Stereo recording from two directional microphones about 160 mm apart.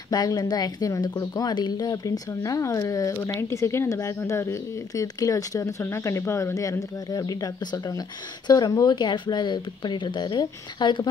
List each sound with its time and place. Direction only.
0.1 s a woman's voice: 25° left (ahead or behind)